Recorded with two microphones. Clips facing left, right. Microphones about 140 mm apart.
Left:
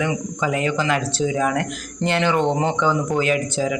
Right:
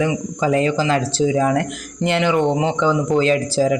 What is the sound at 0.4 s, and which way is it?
Speech, 30° right (ahead or behind).